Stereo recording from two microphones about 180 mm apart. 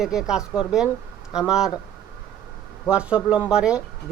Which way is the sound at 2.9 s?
5° right (ahead or behind).